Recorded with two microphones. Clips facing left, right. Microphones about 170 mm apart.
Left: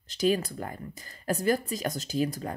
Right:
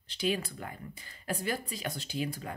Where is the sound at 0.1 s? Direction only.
40° left (ahead or behind).